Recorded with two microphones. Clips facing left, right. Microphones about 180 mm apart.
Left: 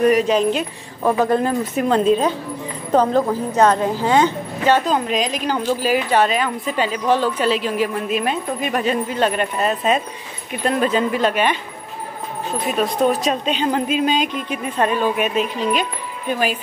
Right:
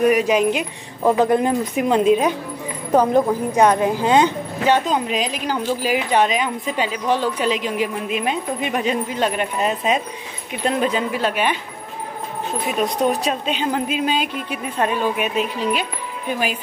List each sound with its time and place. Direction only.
0.0 s speech: 10° right (ahead or behind)
4.9 s speech: 5° right (ahead or behind)
13.1 s speech: 10° right (ahead or behind)